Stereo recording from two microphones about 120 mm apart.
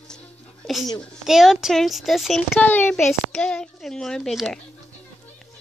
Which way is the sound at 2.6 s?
15° left (ahead or behind).